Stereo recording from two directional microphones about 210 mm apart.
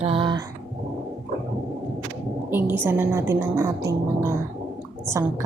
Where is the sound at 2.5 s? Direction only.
10° right (ahead or behind).